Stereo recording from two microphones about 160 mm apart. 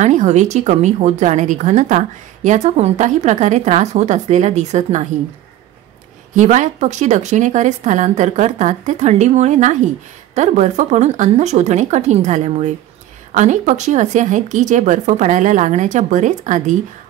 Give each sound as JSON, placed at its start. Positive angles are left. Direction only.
{"t": 0.0, "sound": "speech", "side_deg": -45}
{"t": 6.3, "sound": "speech", "side_deg": -50}